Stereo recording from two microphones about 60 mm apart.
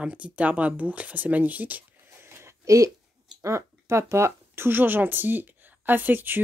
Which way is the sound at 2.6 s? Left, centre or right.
Right.